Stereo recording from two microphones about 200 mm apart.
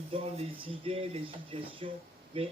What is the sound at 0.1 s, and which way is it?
Speech, 30° right (ahead or behind).